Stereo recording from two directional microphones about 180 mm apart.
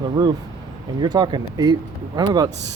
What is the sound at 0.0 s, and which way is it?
Speech, 25° right (ahead or behind).